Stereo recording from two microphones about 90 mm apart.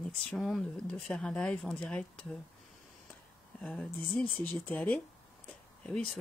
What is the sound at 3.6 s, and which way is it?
Speech, 10° left (ahead or behind).